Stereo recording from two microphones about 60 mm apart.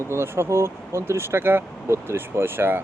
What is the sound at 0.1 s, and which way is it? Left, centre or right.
Speech, right.